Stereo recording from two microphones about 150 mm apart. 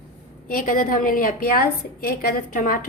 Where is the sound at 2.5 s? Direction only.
70° left (ahead or behind).